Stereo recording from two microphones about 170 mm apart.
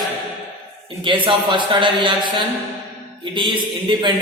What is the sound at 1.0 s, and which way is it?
A man's voice, 30° right (ahead or behind).